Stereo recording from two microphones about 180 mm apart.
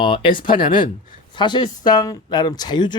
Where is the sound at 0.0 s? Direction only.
30° left (ahead or behind).